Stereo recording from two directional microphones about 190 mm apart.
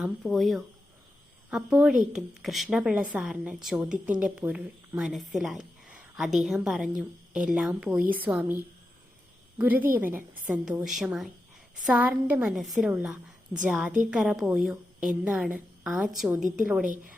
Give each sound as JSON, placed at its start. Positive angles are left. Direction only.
{"t": 0.0, "sound": "a woman's voice", "side_deg": 0}